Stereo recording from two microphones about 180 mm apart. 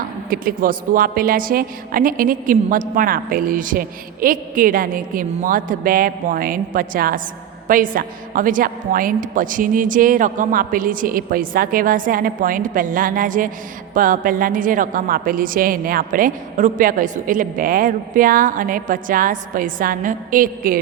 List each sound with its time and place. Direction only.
0.3 s a woman's voice: 50° right (ahead or behind)